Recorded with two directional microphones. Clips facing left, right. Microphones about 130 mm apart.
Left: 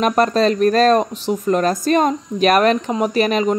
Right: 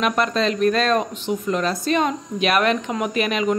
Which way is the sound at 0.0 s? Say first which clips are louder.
Left 5 dB; 40° left (ahead or behind).